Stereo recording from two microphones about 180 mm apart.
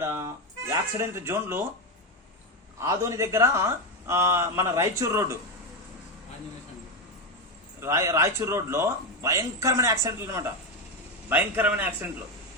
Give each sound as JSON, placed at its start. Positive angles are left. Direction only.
{"t": 0.0, "sound": "music", "side_deg": -15}
{"t": 0.7, "sound": "speech", "side_deg": -15}
{"t": 2.7, "sound": "speech", "side_deg": -15}
{"t": 7.8, "sound": "speech", "side_deg": -15}